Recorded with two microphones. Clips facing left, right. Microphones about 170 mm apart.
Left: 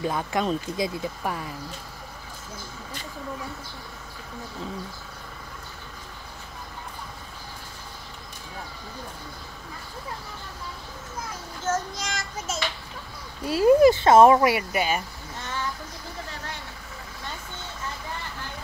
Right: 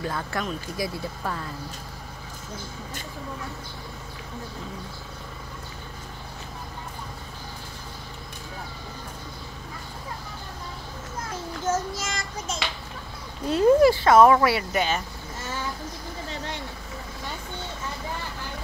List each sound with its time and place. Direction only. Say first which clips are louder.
0.0 s speech: left 4 dB; 20° left (ahead or behind)
11.6 s child singing: right 1 dB; 5° right (ahead or behind)
13.5 s speech: even; 5° left (ahead or behind)
13.7 s speech: left 2 dB; 20° left (ahead or behind)